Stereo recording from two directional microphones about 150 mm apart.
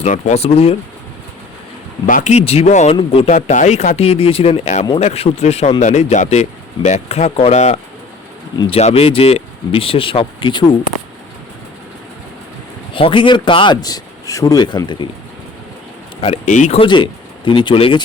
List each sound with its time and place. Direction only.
0.0 s speech: 50° left (ahead or behind)
2.0 s speech: 65° left (ahead or behind)
2.3 s speech: 45° left (ahead or behind)
3.4 s speech: 50° left (ahead or behind); by 10.7 s 35° left (ahead or behind)
12.9 s speech: 35° left (ahead or behind)
16.2 s speech: 50° left (ahead or behind)
16.8 s speech: 35° left (ahead or behind)